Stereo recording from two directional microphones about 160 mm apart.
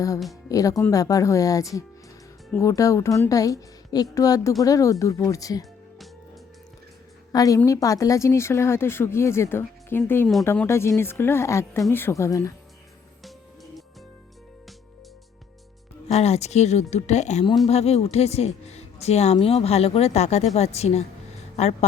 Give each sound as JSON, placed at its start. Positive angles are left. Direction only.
{"t": 0.4, "sound": "a woman's voice", "side_deg": 20}
{"t": 7.3, "sound": "a woman's voice", "side_deg": 20}
{"t": 16.0, "sound": "a woman's voice", "side_deg": 40}